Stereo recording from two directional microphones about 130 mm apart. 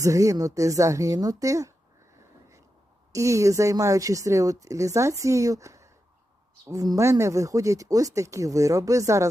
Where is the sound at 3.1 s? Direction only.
25° right (ahead or behind).